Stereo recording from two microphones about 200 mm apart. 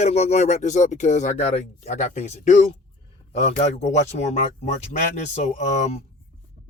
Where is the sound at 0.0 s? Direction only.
35° left (ahead or behind).